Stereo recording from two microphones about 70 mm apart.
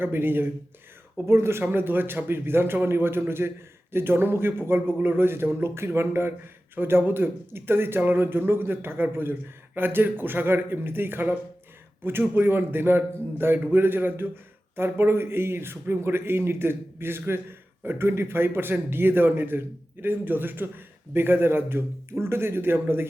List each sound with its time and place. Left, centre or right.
0.0 s speech: right